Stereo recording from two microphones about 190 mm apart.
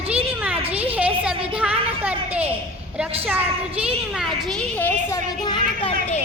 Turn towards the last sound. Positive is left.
turn(degrees=25)  # may be behind; listen again after turning